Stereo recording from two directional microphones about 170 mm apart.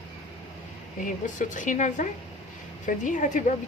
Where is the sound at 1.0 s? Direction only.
50° left (ahead or behind).